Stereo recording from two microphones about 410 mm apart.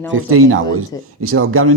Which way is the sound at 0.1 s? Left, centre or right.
Right.